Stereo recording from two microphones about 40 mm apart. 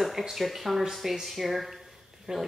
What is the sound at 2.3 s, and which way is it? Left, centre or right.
Speech, centre.